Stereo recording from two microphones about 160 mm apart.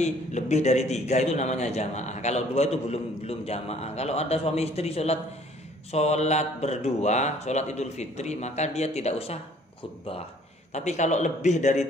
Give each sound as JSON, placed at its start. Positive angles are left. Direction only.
{"t": 0.0, "sound": "a man's voice", "side_deg": 45}
{"t": 10.7, "sound": "a man's voice", "side_deg": 45}